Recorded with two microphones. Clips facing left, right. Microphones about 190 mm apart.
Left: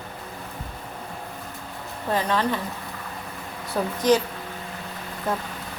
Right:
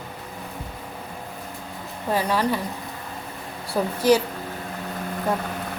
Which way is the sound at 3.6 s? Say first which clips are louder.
Right 2 dB; 10° right (ahead or behind).